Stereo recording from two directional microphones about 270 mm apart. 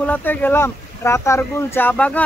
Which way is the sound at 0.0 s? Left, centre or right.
Centre.